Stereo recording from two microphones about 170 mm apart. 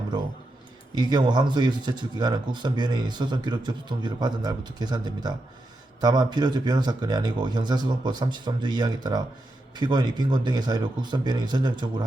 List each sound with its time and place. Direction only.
0.9 s speech: 25° right (ahead or behind)